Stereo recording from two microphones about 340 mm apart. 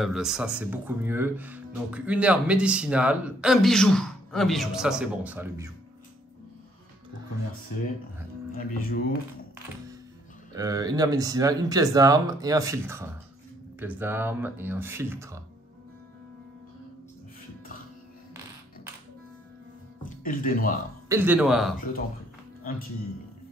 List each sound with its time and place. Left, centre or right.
0.0 s speech: centre
8.5 s speech: left
10.5 s speech: centre
20.0 s speech: left
21.1 s speech: centre
22.6 s speech: left